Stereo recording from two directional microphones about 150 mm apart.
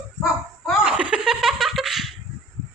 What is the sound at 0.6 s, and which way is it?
Speech, 5° right (ahead or behind).